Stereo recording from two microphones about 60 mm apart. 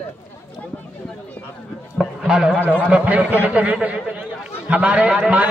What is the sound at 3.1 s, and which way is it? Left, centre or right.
A man's voice, right.